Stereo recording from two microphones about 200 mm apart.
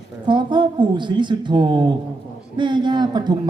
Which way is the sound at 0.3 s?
25° right (ahead or behind).